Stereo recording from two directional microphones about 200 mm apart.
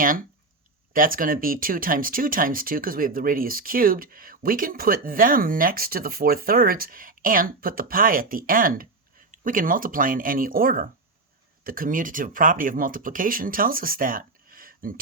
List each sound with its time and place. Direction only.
0.9 s speech: 45° right (ahead or behind)